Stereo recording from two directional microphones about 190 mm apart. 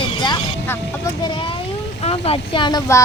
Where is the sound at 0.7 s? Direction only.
20° left (ahead or behind).